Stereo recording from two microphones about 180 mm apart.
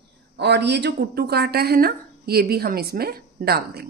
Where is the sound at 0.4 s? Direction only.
70° right (ahead or behind).